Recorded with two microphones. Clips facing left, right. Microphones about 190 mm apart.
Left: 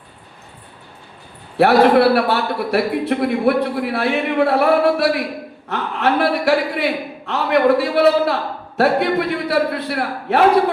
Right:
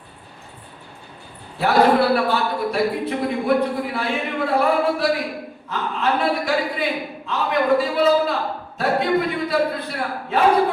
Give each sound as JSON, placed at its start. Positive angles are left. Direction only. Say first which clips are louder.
{"t": 1.5, "sound": "a man's voice", "louder": "left 4 dB", "side_deg": 70}